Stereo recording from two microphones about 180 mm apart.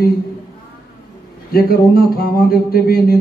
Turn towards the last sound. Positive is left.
turn(degrees=55)  # may be behind; listen again after turning